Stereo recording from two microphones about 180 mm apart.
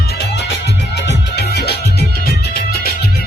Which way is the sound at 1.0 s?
65° left (ahead or behind).